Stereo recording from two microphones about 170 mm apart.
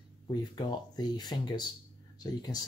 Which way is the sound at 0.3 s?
25° left (ahead or behind).